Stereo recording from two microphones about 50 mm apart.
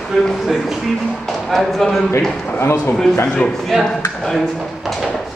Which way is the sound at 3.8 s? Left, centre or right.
Centre.